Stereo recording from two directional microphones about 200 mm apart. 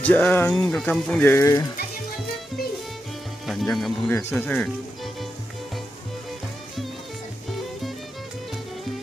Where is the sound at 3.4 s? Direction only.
Centre (ahead or behind).